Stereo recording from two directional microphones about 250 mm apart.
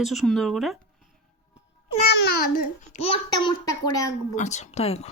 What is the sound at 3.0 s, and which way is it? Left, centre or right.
A child's voice, centre.